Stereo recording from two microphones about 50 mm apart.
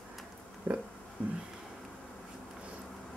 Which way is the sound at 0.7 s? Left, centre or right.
Right.